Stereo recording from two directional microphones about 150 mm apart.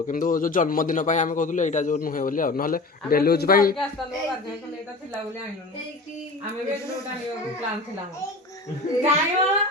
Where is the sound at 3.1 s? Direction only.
85° left.